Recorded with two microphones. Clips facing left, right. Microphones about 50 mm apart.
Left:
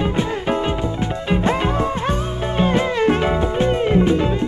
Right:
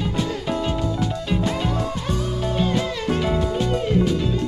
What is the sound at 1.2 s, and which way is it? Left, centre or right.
Music, left.